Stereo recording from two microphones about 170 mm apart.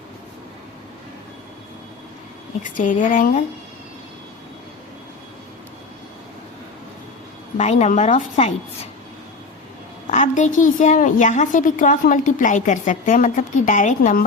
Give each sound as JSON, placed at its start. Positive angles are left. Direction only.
{"t": 2.6, "sound": "a woman's voice", "side_deg": 50}
{"t": 7.6, "sound": "a woman's voice", "side_deg": 40}
{"t": 10.1, "sound": "a woman's voice", "side_deg": 45}